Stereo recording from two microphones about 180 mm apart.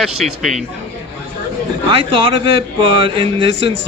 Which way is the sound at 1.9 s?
30° right (ahead or behind).